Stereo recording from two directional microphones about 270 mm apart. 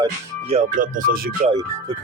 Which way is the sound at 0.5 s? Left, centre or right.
Right.